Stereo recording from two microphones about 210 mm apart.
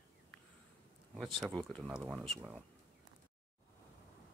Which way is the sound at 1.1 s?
Centre (ahead or behind).